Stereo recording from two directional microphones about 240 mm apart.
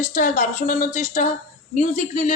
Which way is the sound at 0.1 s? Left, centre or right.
Left.